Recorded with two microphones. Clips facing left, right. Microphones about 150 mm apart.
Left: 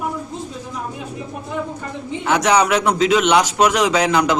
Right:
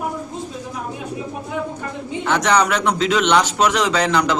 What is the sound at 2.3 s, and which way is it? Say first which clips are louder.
A man's voice: left 2 dB; 10° left (ahead or behind).